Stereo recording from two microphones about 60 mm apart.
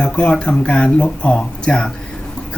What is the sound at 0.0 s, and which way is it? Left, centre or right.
Speech, centre.